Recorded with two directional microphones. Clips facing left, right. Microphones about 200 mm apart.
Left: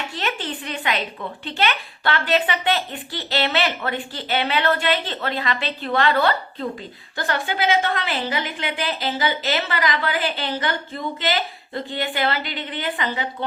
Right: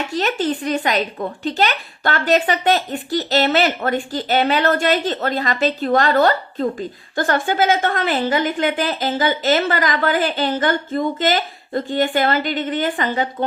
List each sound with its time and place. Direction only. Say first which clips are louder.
0.1 s a woman's voice: right 8 dB; 40° right (ahead or behind)